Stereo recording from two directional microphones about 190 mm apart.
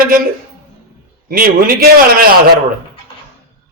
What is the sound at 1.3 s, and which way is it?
A man's voice, 50° right (ahead or behind).